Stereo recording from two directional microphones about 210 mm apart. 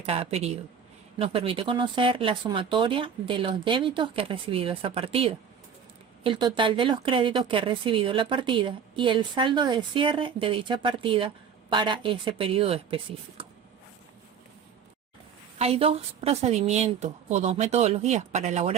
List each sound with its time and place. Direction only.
0.0 s speech: 30° right (ahead or behind)
15.5 s a woman's voice: 30° right (ahead or behind)